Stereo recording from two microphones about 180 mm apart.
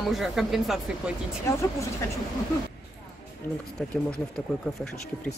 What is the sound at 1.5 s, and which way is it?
Speech, 15° left (ahead or behind).